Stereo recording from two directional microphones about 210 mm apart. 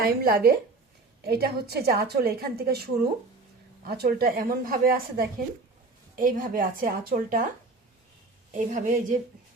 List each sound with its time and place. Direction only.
0.0 s a woman's voice: 45° right (ahead or behind)
8.5 s a woman's voice: 40° right (ahead or behind)